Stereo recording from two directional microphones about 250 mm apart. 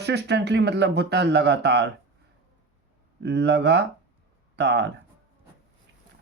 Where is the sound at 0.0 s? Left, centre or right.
Right.